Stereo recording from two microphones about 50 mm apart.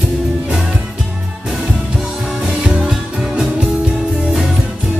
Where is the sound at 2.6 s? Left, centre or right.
Centre.